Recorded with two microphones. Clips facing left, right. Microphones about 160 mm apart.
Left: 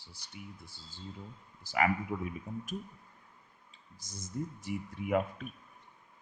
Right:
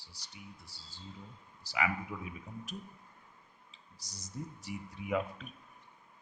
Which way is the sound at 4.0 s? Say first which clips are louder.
Left 5 dB; 50° left (ahead or behind).